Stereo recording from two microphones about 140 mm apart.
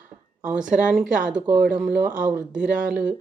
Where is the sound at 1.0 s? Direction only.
65° right (ahead or behind).